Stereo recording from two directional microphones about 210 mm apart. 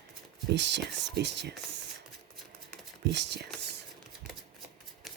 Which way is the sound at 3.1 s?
55° right (ahead or behind).